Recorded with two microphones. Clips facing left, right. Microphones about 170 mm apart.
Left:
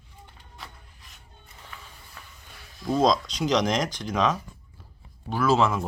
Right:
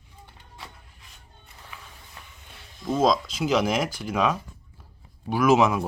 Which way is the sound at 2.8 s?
5° right (ahead or behind).